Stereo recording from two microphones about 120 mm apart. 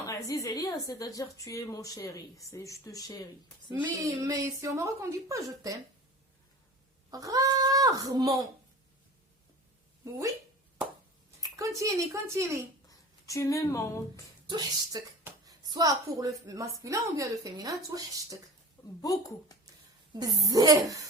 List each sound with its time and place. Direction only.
0.0 s a woman's voice: 30° left (ahead or behind)
3.9 s a woman's voice: 25° right (ahead or behind)
7.1 s speech: 30° right (ahead or behind)
10.0 s a woman's voice: 25° right (ahead or behind)
11.5 s a woman's voice: 25° right (ahead or behind)
12.9 s speech: 25° left (ahead or behind)
14.9 s a woman's voice: 30° right (ahead or behind)
19.0 s a woman's voice: 30° left (ahead or behind)
20.1 s a woman's voice: 30° right (ahead or behind)